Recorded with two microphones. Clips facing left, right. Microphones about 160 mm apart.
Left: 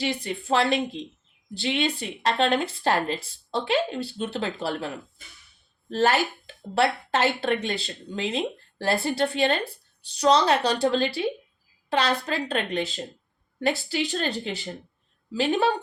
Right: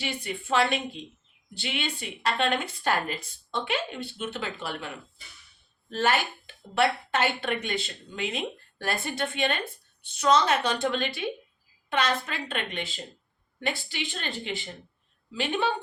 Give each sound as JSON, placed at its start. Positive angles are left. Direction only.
{"t": 0.0, "sound": "a woman's voice", "side_deg": 35}